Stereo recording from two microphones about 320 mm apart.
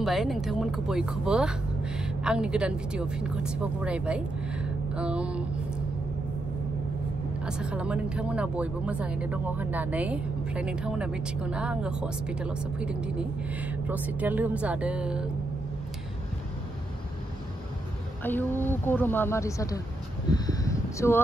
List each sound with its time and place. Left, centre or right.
0.0 s speech: centre
7.4 s speech: centre
18.2 s speech: centre
20.4 s a sound: centre